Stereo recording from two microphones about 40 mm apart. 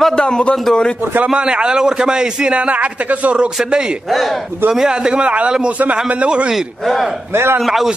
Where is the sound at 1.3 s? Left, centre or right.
Right.